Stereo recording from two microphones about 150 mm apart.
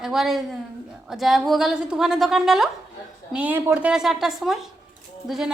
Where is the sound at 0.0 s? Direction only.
5° right (ahead or behind).